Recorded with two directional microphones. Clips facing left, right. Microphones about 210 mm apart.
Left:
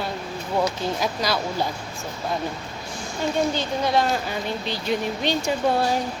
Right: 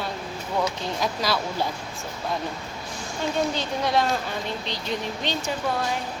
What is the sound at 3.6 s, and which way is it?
Speech, centre (ahead or behind).